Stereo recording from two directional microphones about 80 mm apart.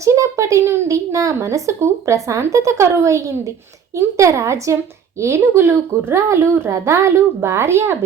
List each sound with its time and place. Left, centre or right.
0.0 s speech: right